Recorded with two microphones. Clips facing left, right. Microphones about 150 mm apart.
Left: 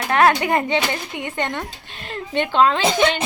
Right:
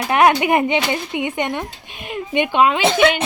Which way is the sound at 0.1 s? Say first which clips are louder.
Right 2 dB; 15° right (ahead or behind).